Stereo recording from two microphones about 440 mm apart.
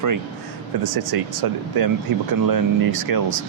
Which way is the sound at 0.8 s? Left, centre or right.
Right.